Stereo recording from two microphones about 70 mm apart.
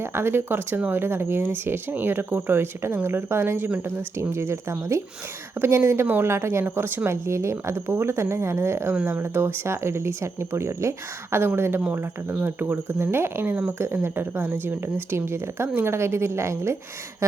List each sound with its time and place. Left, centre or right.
0.0 s speech: right
13.7 s speech: right